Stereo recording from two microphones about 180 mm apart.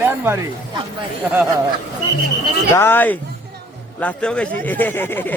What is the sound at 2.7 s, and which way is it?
Speech, 10° left (ahead or behind).